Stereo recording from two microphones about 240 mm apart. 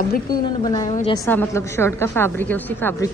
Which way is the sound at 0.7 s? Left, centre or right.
Centre.